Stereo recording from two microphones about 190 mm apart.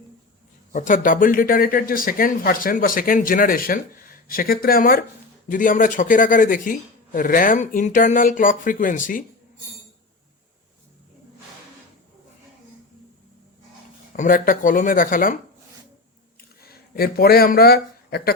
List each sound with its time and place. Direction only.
0.7 s speech: 45° left (ahead or behind)
14.1 s speech: 45° left (ahead or behind)
16.6 s speech: 55° left (ahead or behind)